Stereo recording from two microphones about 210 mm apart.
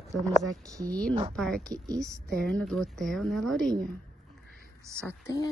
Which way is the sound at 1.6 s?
15° right (ahead or behind).